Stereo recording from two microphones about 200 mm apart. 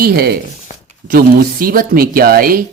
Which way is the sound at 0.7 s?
40° left (ahead or behind).